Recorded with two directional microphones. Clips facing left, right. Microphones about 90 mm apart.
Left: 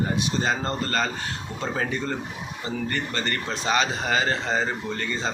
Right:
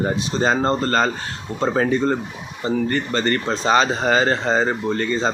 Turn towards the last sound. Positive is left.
turn(degrees=-40)  # may be behind; listen again after turning